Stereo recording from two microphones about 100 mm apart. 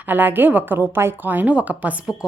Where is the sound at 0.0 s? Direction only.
20° right (ahead or behind).